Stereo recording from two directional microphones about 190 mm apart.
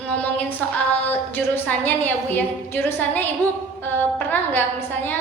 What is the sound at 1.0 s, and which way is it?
A woman's voice, 10° left (ahead or behind).